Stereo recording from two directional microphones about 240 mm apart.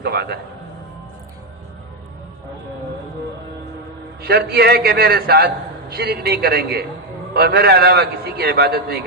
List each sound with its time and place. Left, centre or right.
0.0 s a man's voice: right
4.2 s a man's voice: right